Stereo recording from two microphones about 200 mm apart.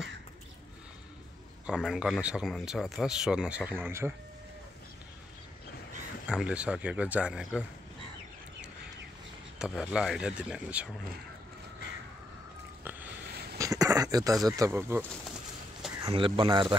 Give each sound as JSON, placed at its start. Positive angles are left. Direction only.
{"t": 1.7, "sound": "speech", "side_deg": -5}
{"t": 6.2, "sound": "speech", "side_deg": -5}
{"t": 9.6, "sound": "speech", "side_deg": -5}
{"t": 13.6, "sound": "a sound", "side_deg": -15}
{"t": 14.6, "sound": "speech", "side_deg": -15}
{"t": 16.1, "sound": "speech", "side_deg": -25}